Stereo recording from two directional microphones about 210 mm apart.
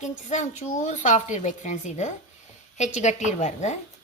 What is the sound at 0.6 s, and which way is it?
Speech, 35° left (ahead or behind).